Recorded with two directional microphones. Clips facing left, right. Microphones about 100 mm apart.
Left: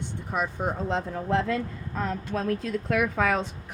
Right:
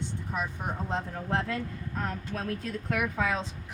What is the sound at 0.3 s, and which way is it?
Speech, 90° left.